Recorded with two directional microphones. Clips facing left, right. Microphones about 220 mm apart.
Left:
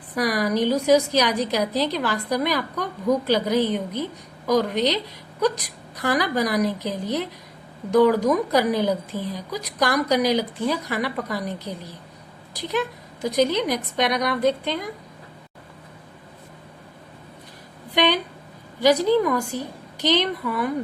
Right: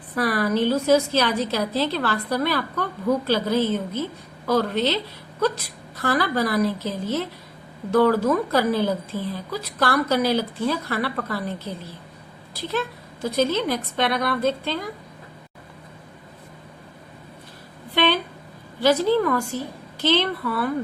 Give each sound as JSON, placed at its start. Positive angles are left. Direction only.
{"t": 0.2, "sound": "a woman's voice", "side_deg": 15}
{"t": 17.9, "sound": "a woman's voice", "side_deg": 15}